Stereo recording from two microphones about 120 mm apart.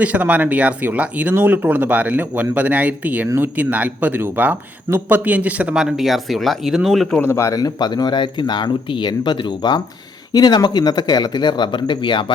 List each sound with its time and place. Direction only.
0.0 s speech: 10° right (ahead or behind)
7.2 s speech: 20° left (ahead or behind); by 12.2 s 40° left (ahead or behind)